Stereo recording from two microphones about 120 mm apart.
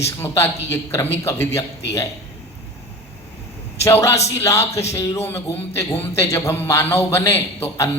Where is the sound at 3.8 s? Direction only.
25° left (ahead or behind).